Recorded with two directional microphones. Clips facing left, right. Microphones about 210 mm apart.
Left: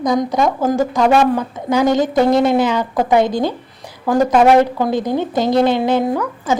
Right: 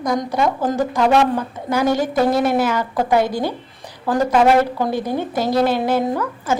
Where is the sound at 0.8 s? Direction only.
10° left (ahead or behind).